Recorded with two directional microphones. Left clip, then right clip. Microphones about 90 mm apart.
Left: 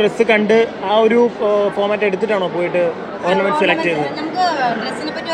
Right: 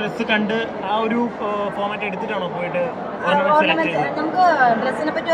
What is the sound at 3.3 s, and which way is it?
Speech, 80° left.